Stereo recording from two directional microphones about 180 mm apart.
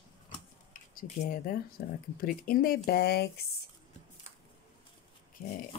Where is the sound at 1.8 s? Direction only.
60° left (ahead or behind).